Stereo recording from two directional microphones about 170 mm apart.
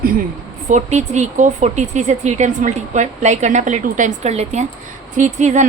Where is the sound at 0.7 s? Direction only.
45° right (ahead or behind).